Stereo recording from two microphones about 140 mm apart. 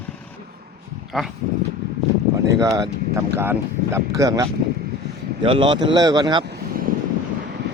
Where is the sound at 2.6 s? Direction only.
25° right (ahead or behind).